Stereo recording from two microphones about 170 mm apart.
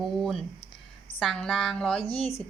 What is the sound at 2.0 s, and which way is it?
Speech, 35° left (ahead or behind).